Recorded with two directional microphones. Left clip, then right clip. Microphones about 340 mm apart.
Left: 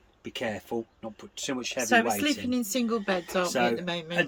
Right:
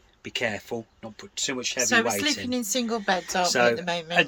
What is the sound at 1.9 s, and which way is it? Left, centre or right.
A woman's voice, centre.